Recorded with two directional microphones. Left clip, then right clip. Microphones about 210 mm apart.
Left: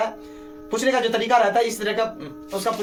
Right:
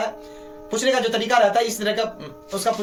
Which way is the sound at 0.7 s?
20° right (ahead or behind).